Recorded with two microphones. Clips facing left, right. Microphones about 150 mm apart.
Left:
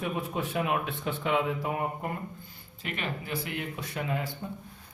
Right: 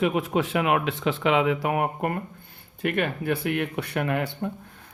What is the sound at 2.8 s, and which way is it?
Speech, 55° right (ahead or behind).